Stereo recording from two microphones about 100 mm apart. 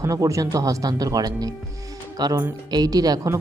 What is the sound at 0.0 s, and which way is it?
A woman's voice, 35° right (ahead or behind).